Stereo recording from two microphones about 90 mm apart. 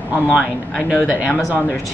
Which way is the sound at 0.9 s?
15° right (ahead or behind).